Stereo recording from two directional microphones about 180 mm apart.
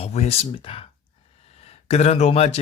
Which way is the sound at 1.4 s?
35° left (ahead or behind).